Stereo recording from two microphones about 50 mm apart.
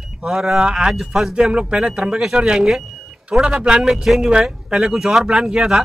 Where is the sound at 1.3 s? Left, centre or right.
Centre.